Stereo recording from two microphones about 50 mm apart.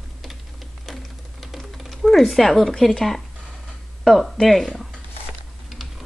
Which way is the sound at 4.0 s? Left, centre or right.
Centre.